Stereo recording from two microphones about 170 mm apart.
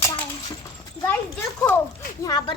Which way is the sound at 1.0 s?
10° left (ahead or behind).